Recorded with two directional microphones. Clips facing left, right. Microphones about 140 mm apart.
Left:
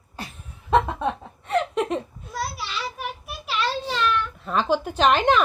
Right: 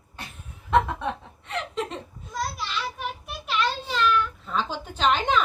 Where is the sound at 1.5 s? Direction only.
55° left (ahead or behind).